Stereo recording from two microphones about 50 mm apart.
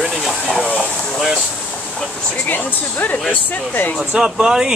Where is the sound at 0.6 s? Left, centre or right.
Left.